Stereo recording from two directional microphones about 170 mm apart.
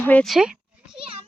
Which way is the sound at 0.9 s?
35° right (ahead or behind).